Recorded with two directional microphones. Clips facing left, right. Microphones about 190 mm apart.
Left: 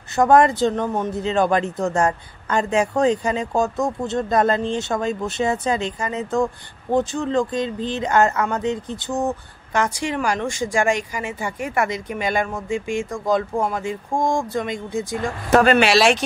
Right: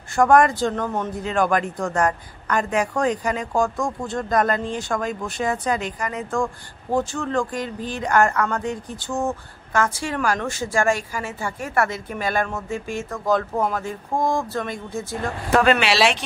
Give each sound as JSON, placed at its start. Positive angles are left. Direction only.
{"t": 0.1, "sound": "a man's voice", "side_deg": 20}
{"t": 15.5, "sound": "speech", "side_deg": 40}